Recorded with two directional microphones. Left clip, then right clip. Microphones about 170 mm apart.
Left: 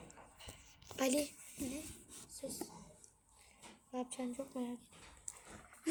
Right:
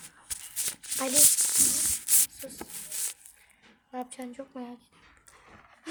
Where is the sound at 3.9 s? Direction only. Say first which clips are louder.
Right 5 dB; 10° left (ahead or behind).